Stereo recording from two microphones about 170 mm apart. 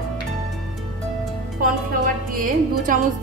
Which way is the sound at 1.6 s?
55° right (ahead or behind).